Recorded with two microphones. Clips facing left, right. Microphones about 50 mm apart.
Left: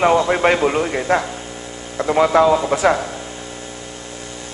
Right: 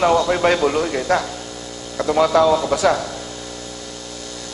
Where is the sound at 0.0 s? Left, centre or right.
Left.